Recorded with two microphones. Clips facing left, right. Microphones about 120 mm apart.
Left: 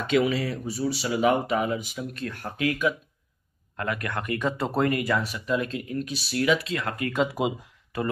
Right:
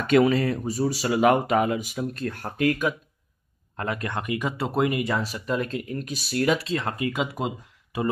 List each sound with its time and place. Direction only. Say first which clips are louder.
0.0 s speech: right 4 dB; 50° right (ahead or behind)
3.7 s speech: right 1 dB; 30° right (ahead or behind)
4.2 s speech: left 2 dB; 10° right (ahead or behind)
4.9 s speech: even; 25° right (ahead or behind)
7.4 s speech: left 3 dB; 5° left (ahead or behind)